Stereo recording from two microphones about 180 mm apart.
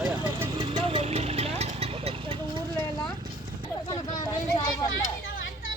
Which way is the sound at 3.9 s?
20° left (ahead or behind).